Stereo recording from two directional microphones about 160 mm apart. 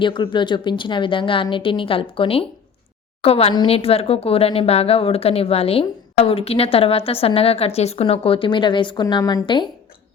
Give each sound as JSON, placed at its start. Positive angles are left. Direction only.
{"t": 0.0, "sound": "a woman's voice", "side_deg": 30}